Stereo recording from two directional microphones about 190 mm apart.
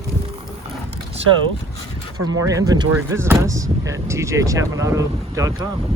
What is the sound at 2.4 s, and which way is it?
Speech, 15° right (ahead or behind).